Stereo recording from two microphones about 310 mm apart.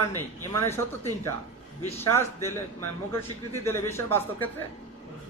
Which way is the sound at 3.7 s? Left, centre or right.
Centre.